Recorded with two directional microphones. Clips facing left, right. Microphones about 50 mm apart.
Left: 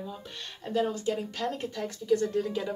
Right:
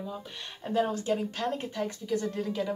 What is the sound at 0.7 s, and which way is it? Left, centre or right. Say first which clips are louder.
Speech: right 1 dB; right.